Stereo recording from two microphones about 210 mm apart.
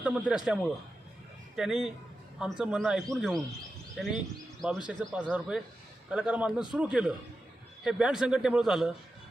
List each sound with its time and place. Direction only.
0.0 s a man's voice: 5° right (ahead or behind)